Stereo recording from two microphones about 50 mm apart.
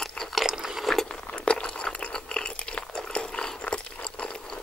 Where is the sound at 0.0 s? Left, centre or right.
Centre.